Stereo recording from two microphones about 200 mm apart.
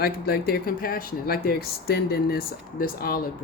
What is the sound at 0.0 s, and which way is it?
Speech, 50° left (ahead or behind).